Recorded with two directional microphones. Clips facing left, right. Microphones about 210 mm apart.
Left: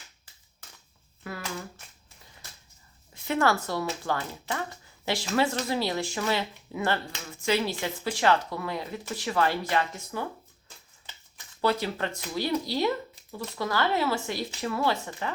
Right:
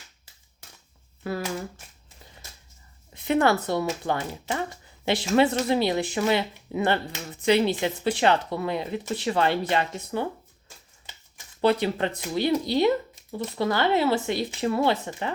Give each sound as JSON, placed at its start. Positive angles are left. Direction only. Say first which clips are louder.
{"t": 3.2, "sound": "speech", "louder": "right 4 dB", "side_deg": -20}
{"t": 11.6, "sound": "speech", "louder": "right 5 dB", "side_deg": -20}